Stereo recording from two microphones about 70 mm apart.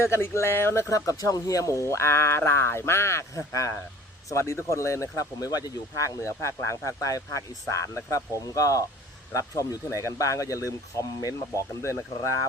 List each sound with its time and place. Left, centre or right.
0.0 s speech: left
6.2 s speech: left
10.1 s speech: left